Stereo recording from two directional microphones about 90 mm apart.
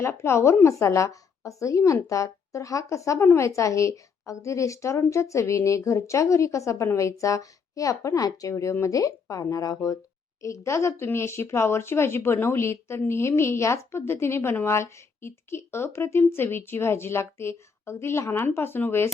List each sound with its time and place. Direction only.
0.0 s a woman's voice: 30° left (ahead or behind)